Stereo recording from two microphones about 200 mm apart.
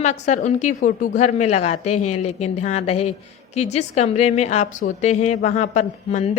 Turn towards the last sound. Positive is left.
turn(degrees=35)  # may be behind; listen again after turning